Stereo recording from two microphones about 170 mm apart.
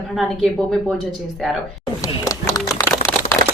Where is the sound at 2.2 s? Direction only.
20° left (ahead or behind).